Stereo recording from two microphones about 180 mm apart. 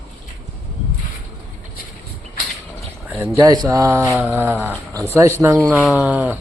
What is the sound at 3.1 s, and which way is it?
Speech, 10° right (ahead or behind).